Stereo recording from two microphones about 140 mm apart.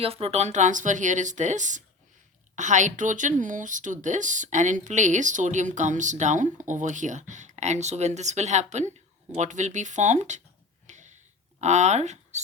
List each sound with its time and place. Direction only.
0.0 s speech: 45° right (ahead or behind)
10.8 s a sound: 60° right (ahead or behind)
11.6 s speech: 55° right (ahead or behind)